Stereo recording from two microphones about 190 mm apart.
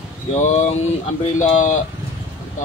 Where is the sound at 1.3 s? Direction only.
40° left (ahead or behind).